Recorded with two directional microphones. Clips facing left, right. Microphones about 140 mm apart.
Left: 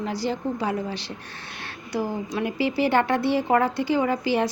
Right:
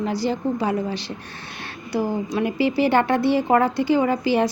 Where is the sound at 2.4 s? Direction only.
20° right (ahead or behind).